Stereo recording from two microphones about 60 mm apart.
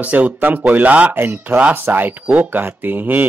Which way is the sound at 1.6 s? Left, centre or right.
Right.